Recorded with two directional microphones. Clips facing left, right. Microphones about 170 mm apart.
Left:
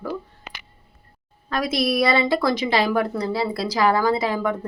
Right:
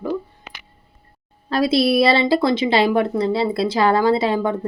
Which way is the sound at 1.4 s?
30° right (ahead or behind).